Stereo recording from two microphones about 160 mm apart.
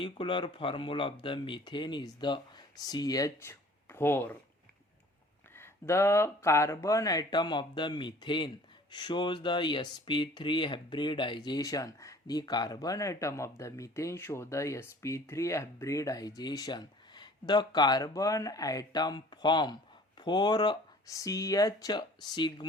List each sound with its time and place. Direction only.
0.0 s speech: 35° left (ahead or behind); by 4.4 s 15° left (ahead or behind)
5.5 s speech: 15° left (ahead or behind)